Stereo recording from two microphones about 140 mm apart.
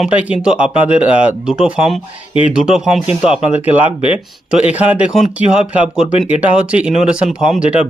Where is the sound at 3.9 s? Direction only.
45° left (ahead or behind).